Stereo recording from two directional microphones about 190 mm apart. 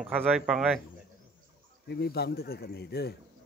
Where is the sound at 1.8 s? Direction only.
60° left (ahead or behind).